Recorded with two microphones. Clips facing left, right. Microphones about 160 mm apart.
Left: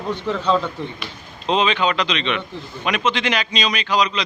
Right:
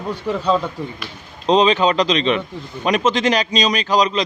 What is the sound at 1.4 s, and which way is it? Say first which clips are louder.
A man's voice: right 5 dB; 35° right (ahead or behind).